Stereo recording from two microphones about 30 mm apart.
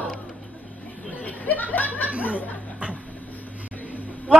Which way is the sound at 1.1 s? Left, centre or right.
Left.